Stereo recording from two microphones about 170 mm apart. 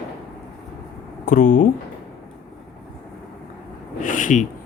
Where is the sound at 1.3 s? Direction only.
50° left (ahead or behind).